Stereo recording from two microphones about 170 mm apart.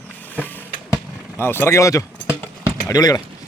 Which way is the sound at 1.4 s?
15° left (ahead or behind).